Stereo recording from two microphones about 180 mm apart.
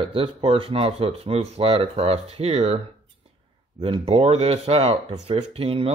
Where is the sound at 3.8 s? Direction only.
35° right (ahead or behind).